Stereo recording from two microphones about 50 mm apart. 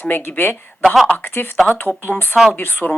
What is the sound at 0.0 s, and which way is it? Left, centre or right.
Speech, left.